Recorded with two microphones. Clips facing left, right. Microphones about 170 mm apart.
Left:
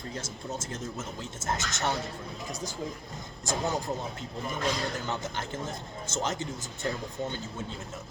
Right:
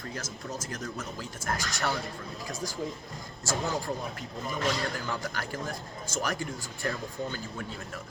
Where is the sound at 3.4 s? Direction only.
20° left (ahead or behind).